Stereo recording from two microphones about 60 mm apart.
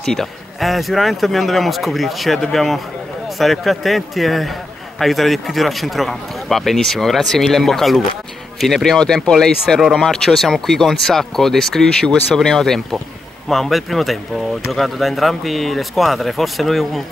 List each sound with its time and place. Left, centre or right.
0.0 s a man's voice: centre